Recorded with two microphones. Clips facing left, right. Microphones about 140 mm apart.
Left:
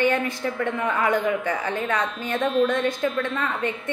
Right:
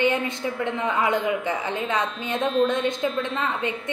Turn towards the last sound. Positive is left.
turn(degrees=-20)  # may be behind; listen again after turning